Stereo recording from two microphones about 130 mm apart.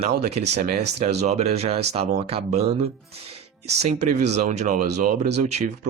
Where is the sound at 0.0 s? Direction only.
55° right (ahead or behind).